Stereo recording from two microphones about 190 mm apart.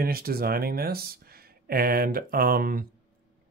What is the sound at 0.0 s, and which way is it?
Speech, 50° right (ahead or behind).